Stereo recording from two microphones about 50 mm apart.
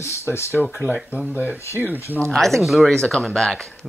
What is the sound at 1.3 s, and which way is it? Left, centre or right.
Speech, right.